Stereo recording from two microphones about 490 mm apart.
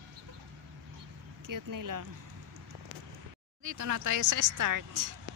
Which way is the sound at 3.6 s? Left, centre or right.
Right.